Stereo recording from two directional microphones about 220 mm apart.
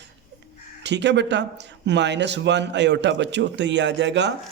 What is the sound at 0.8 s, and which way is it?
Speech, 50° right (ahead or behind).